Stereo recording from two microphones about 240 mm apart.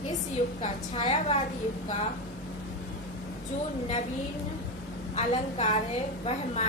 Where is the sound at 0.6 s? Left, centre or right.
Centre.